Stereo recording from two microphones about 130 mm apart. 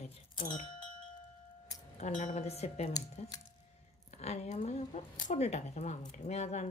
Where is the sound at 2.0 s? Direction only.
75° left (ahead or behind); by 2.9 s 55° left (ahead or behind).